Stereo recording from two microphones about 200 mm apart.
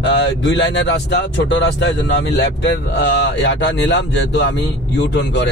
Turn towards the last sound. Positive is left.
turn(degrees=60)  # may be behind; listen again after turning